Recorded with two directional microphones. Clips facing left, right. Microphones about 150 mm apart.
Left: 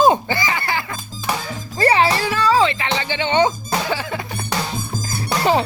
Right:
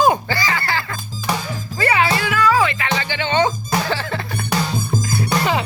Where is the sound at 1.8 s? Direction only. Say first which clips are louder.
Left 2 dB; 35° left (ahead or behind); by 4.2 s 15° left (ahead or behind).